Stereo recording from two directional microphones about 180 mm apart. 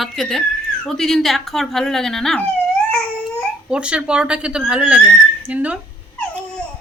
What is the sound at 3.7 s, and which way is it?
A woman's voice, 5° right (ahead or behind).